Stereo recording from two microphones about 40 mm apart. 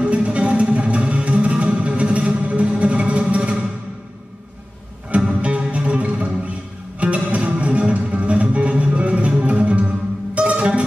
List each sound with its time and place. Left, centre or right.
0.0 s music: right
5.3 s music: right